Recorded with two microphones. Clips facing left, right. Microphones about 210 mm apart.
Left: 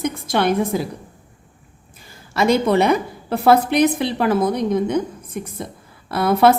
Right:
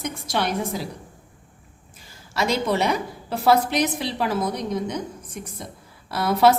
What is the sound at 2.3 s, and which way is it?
A woman's voice, 55° left (ahead or behind).